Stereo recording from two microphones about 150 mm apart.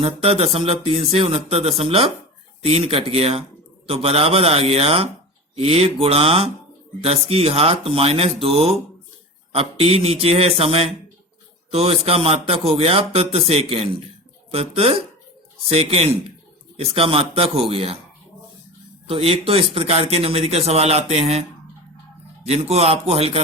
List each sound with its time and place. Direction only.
0.0 s speech: 40° right (ahead or behind)
19.0 s speech: 40° right (ahead or behind)
22.4 s speech: 45° right (ahead or behind)